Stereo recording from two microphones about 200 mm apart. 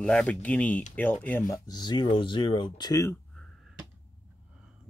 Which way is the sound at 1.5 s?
20° left (ahead or behind).